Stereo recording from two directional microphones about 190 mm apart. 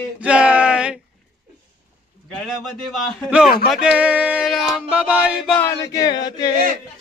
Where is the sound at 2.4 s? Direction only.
5° right (ahead or behind).